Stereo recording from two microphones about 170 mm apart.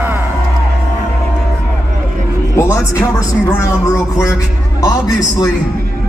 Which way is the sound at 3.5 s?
15° left (ahead or behind).